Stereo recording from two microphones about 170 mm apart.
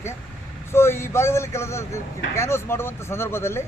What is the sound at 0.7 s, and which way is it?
A man's voice, 15° left (ahead or behind).